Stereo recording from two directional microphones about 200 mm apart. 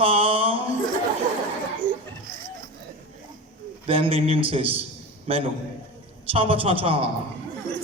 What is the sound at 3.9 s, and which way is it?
A man's voice, 30° right (ahead or behind).